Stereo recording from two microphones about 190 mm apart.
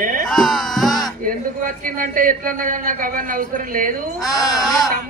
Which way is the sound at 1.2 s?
45° right (ahead or behind).